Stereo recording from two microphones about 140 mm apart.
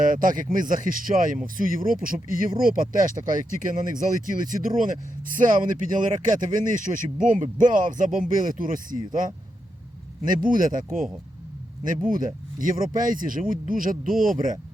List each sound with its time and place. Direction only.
0.0 s speech: 70° right (ahead or behind)
10.2 s speech: 75° right (ahead or behind)
12.0 s speech: 75° right (ahead or behind)